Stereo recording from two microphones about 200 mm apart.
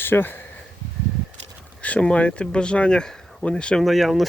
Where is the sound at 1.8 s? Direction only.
5° left (ahead or behind).